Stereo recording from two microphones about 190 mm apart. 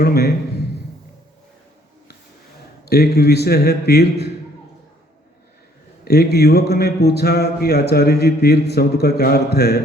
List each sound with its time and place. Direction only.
0.0 s speech: 55° left (ahead or behind)
2.9 s speech: 55° left (ahead or behind)
6.1 s speech: 55° left (ahead or behind)